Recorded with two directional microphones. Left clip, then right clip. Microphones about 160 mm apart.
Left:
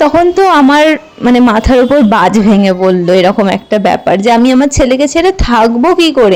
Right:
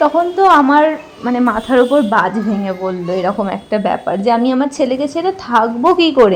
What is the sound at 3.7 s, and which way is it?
A woman's voice, 25° left (ahead or behind).